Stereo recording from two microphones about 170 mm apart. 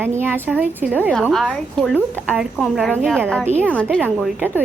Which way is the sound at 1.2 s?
Centre (ahead or behind).